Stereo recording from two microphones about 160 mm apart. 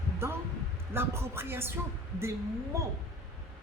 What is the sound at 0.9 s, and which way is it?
Speech, 15° right (ahead or behind).